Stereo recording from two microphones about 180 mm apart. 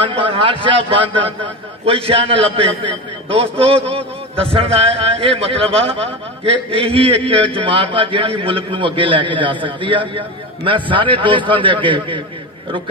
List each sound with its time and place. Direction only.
0.0 s a man's voice: 30° right (ahead or behind)